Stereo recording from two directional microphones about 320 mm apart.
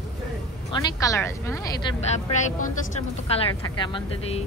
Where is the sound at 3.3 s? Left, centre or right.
Centre.